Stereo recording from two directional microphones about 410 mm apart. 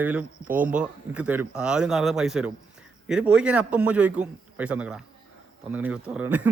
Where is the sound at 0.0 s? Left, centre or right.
Centre.